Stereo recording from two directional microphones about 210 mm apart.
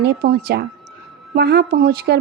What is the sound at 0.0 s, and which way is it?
A woman's voice, 45° right (ahead or behind).